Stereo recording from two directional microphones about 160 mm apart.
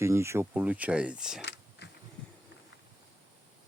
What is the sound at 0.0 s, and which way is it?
Speech, 15° right (ahead or behind).